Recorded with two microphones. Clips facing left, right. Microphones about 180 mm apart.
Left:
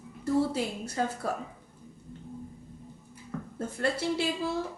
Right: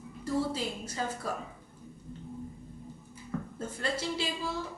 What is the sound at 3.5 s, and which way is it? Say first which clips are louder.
Speech: left 6 dB; 60° left (ahead or behind).